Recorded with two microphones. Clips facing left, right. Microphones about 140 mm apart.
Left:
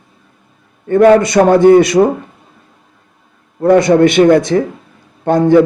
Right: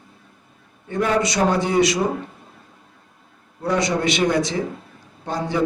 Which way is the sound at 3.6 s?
55° left (ahead or behind).